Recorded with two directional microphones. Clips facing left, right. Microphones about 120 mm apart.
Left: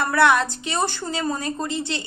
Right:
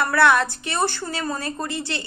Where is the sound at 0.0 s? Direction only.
20° left (ahead or behind).